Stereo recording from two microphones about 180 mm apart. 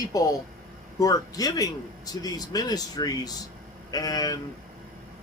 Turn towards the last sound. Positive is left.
turn(degrees=20)  # may be behind; listen again after turning